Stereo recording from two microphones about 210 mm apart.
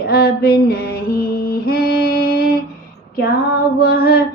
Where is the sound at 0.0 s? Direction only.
45° left (ahead or behind).